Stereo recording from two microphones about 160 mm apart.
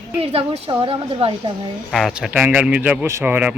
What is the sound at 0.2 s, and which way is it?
A woman's voice, 40° right (ahead or behind).